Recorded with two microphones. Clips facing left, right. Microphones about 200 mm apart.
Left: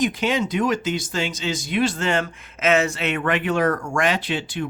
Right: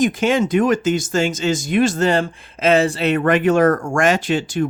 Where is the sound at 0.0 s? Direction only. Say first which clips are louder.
Right 5 dB; 50° right (ahead or behind).